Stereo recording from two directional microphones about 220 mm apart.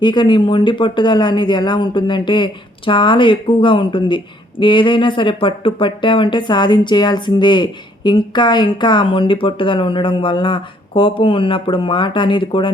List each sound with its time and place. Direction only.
0.0 s speech: 20° left (ahead or behind)